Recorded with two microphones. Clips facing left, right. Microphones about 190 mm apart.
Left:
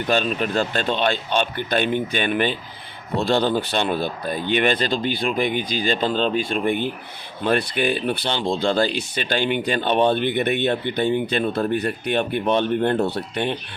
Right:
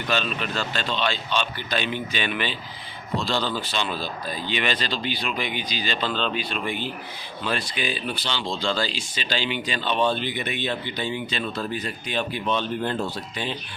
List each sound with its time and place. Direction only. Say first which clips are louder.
0.1 s speech: left 6 dB; 50° left (ahead or behind)